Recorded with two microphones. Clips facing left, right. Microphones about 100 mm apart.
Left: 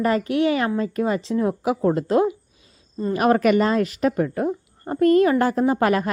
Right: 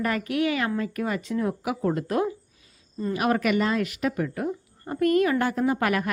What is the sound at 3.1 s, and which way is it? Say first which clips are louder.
A woman's voice: left 6 dB; 40° left (ahead or behind).